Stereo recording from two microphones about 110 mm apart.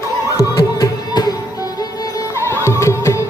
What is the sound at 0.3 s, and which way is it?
Music, 35° left (ahead or behind).